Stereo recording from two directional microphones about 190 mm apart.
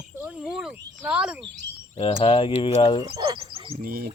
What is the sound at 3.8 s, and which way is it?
Speech, 50° right (ahead or behind).